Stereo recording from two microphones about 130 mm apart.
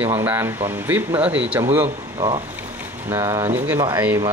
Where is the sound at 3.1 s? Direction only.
20° right (ahead or behind).